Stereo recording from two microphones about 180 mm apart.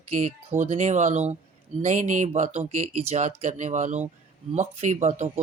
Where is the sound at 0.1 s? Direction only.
40° right (ahead or behind).